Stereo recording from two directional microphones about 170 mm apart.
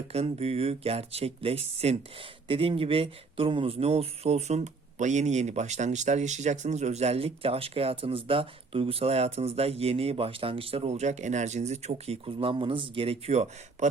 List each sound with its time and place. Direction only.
0.1 s speech: 35° right (ahead or behind)